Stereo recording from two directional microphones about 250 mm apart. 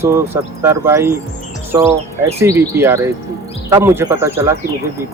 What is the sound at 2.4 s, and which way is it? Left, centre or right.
Speech, centre.